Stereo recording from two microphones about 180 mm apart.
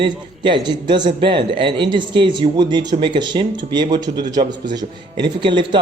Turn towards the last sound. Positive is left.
turn(degrees=-25)  # may be behind; listen again after turning